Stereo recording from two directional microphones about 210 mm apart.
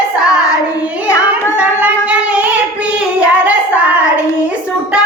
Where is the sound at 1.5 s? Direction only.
5° right (ahead or behind).